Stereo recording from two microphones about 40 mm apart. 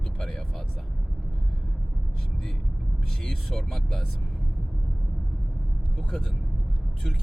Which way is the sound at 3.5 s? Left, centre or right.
Centre.